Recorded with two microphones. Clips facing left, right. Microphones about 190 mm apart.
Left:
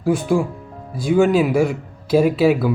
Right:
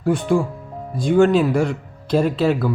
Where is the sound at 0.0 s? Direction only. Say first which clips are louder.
Even; centre (ahead or behind).